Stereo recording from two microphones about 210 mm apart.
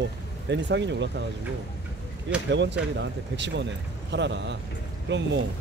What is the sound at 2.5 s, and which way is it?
Speech, 55° right (ahead or behind).